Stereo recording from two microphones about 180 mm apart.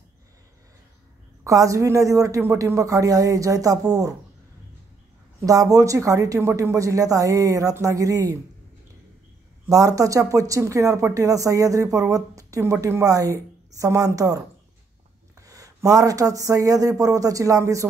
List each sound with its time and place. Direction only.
1.4 s speech: 20° right (ahead or behind)
5.4 s speech: 20° right (ahead or behind)
9.7 s speech: 20° right (ahead or behind)
15.4 s speech: 20° right (ahead or behind)